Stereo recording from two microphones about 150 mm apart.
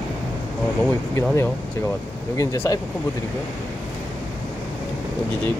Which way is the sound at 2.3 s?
20° left (ahead or behind).